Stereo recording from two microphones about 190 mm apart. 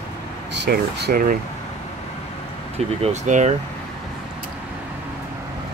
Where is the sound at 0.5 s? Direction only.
65° right (ahead or behind).